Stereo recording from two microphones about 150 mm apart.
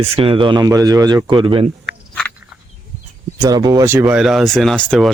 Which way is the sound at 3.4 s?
25° right (ahead or behind).